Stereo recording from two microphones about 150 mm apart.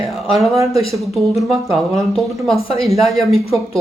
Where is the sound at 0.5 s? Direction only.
20° right (ahead or behind).